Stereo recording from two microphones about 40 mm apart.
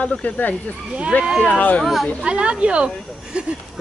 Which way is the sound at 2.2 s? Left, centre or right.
Right.